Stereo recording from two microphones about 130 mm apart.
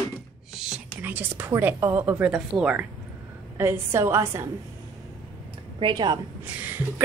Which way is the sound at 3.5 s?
20° right (ahead or behind).